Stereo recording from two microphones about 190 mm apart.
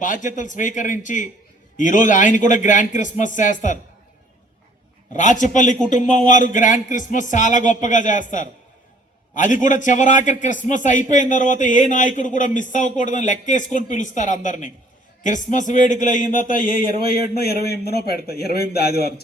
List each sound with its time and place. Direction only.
0.0 s a man's voice: 45° left (ahead or behind)
5.1 s a man's voice: 40° left (ahead or behind)
9.3 s a man's voice: 40° left (ahead or behind)